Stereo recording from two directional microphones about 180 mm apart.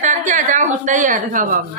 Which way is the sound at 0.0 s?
45° right (ahead or behind).